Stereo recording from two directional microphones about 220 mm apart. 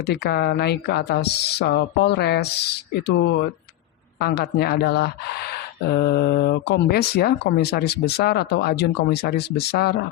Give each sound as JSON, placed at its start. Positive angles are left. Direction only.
{"t": 0.0, "sound": "speech", "side_deg": 45}